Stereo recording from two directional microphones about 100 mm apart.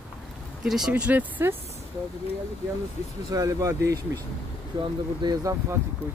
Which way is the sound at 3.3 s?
35° right (ahead or behind).